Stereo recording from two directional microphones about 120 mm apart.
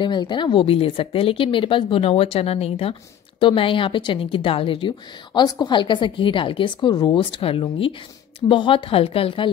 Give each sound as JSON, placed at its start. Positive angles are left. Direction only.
{"t": 0.0, "sound": "a woman's voice", "side_deg": 40}